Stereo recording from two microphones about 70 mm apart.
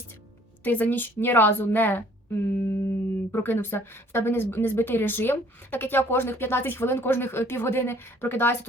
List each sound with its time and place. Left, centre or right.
0.6 s a woman's voice: left